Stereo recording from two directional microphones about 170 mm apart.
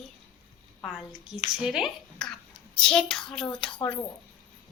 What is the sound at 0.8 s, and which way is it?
A woman's voice, centre (ahead or behind).